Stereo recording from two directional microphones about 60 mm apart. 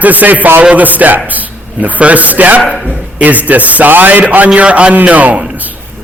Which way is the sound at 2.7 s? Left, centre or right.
Centre.